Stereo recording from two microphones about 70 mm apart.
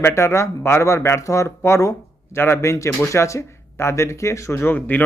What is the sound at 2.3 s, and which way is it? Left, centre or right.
A man's voice, left.